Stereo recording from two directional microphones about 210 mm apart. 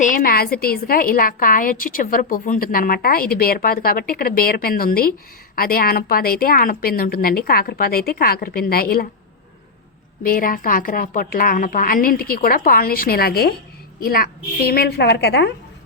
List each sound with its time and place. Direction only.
0.0 s a woman's voice: 40° left (ahead or behind)
10.2 s a woman's voice: 45° left (ahead or behind)